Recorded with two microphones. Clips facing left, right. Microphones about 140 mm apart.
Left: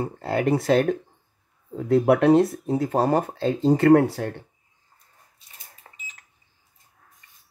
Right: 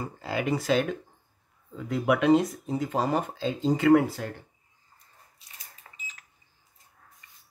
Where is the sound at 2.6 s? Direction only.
70° left (ahead or behind).